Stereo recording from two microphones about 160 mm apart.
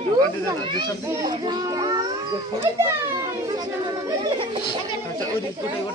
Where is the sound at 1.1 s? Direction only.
25° right (ahead or behind).